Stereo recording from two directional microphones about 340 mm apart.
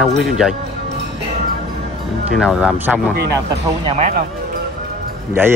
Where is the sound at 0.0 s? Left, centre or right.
Centre.